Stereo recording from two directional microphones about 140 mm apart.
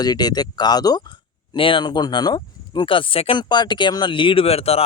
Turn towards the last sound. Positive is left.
turn(degrees=45)  # may be behind; listen again after turning